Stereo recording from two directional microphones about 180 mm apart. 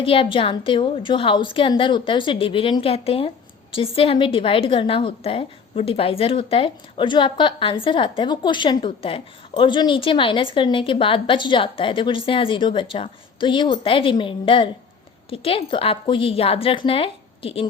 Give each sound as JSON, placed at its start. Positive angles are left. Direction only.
{"t": 0.0, "sound": "a woman's voice", "side_deg": 30}